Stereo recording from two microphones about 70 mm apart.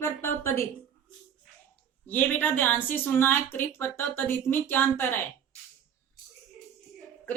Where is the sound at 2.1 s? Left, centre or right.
Left.